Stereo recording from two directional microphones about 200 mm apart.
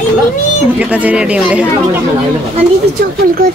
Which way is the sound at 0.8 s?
5° right (ahead or behind).